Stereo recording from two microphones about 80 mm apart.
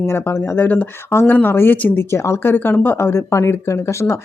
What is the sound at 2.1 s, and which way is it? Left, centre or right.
Speech, left.